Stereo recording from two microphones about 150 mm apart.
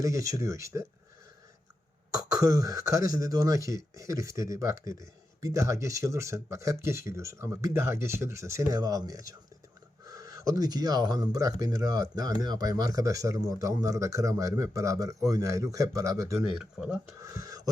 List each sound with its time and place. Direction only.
0.0 s speech: 20° right (ahead or behind)
2.1 s speech: 25° right (ahead or behind)
16.6 s speech: 5° right (ahead or behind)
17.2 s speech: 20° right (ahead or behind)